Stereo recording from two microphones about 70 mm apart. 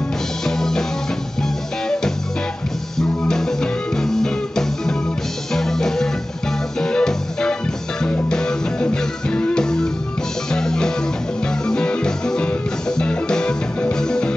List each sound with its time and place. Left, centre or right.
0.5 s music: centre
3.0 s music: centre